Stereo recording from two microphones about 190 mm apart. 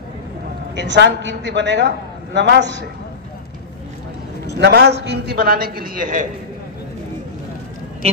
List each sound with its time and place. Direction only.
0.7 s a woman's voice: 65° right (ahead or behind)
4.6 s a man's voice: 60° right (ahead or behind)